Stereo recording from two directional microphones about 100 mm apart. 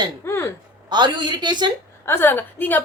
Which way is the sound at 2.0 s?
25° left (ahead or behind).